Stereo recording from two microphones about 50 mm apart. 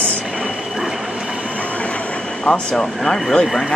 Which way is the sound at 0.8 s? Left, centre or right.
Centre.